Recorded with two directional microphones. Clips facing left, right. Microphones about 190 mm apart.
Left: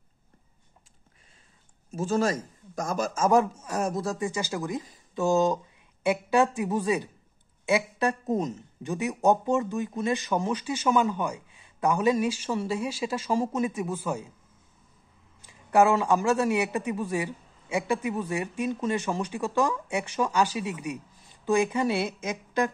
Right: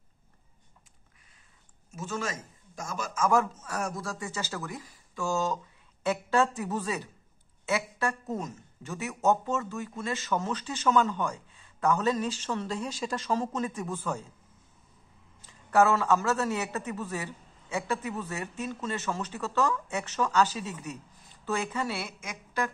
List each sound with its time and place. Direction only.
1.9 s a man's voice: 35° left (ahead or behind)
3.2 s speech: 20° left (ahead or behind)
15.4 s speech: 15° left (ahead or behind)